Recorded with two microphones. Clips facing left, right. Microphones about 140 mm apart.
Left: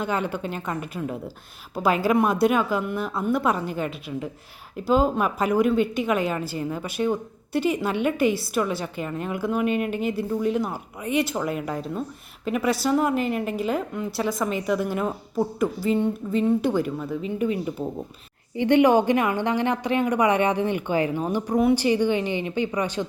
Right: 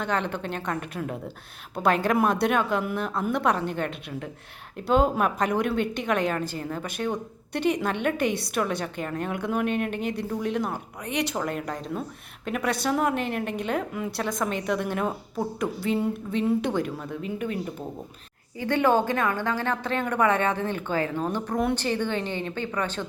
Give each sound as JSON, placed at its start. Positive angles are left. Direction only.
{"t": 0.0, "sound": "a woman's voice", "side_deg": 5}
{"t": 18.5, "sound": "a woman's voice", "side_deg": 20}